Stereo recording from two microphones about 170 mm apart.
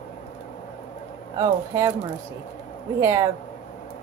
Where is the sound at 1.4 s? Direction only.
20° right (ahead or behind).